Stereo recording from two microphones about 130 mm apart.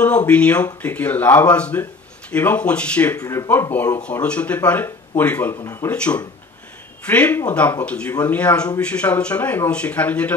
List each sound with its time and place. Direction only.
0.0 s a man's voice: 10° left (ahead or behind)
3.2 s a man's voice: 25° left (ahead or behind)
5.6 s speech: 25° left (ahead or behind)
5.9 s a man's voice: 10° left (ahead or behind)